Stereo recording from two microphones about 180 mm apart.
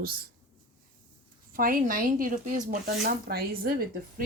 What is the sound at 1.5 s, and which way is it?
Speech, 50° right (ahead or behind).